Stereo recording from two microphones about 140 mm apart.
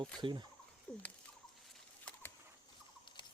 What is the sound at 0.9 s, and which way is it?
Rodents, 10° left (ahead or behind).